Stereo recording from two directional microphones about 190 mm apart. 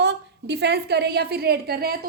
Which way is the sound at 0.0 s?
65° right (ahead or behind).